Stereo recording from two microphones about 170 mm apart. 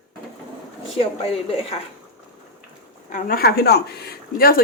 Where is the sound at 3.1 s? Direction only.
55° left (ahead or behind).